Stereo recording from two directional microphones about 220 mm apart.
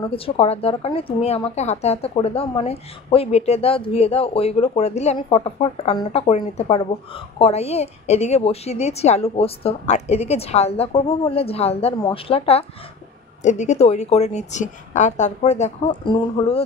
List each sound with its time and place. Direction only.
0.0 s a woman's voice: 25° left (ahead or behind)